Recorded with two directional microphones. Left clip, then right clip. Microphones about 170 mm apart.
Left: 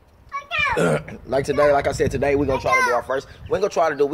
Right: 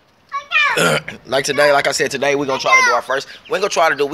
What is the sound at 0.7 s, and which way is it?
Speech, 5° left (ahead or behind).